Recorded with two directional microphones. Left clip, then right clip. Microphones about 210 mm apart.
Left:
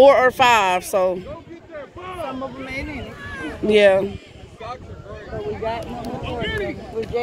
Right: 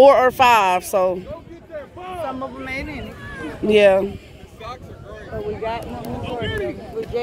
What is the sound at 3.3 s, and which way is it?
Speech, 5° right (ahead or behind).